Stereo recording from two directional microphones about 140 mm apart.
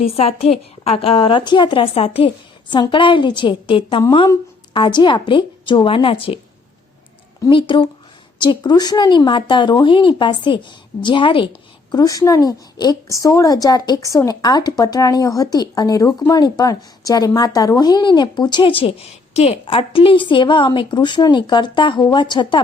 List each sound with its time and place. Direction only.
0.0 s a woman's voice: 45° left (ahead or behind)
7.5 s a woman's voice: 40° left (ahead or behind)
11.9 s a woman's voice: 25° left (ahead or behind)